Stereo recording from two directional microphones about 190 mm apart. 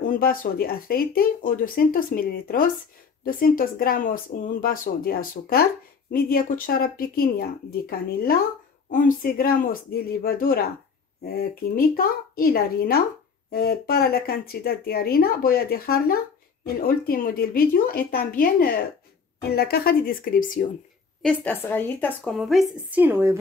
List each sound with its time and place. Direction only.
0.1 s speech: 50° left (ahead or behind)
21.2 s a woman's voice: 5° left (ahead or behind); by 23.3 s 10° right (ahead or behind)